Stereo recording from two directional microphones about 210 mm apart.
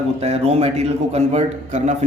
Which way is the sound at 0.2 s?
30° right (ahead or behind).